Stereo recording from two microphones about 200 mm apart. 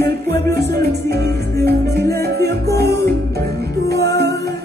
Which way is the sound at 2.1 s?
55° right (ahead or behind).